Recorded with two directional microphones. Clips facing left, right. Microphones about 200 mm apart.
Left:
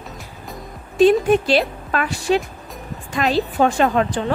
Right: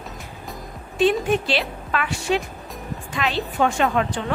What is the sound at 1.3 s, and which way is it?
A woman's voice, 40° left (ahead or behind).